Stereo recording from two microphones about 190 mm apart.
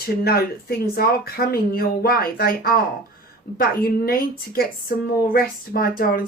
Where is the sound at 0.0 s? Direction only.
55° left (ahead or behind).